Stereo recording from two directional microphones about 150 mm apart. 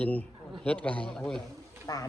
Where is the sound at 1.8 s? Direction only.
25° left (ahead or behind).